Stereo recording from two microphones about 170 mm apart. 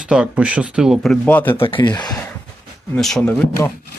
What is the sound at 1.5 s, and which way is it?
Speech, 30° left (ahead or behind).